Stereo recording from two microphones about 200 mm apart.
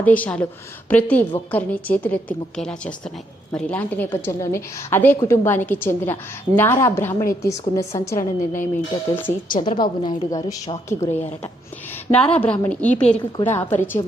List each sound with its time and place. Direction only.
0.0 s a woman's voice: 10° left (ahead or behind)
9.6 s a woman's voice: 20° left (ahead or behind)